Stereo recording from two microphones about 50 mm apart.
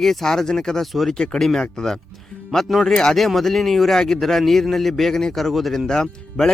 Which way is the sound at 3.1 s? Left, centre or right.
Centre.